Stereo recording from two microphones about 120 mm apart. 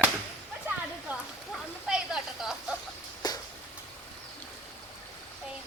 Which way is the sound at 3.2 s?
35° left (ahead or behind).